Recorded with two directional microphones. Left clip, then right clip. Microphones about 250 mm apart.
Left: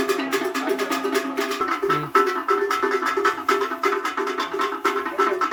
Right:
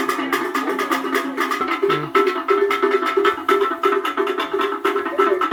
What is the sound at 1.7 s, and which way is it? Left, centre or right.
Music, right.